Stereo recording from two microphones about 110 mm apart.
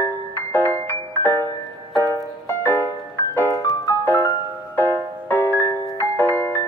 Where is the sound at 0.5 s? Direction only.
20° left (ahead or behind).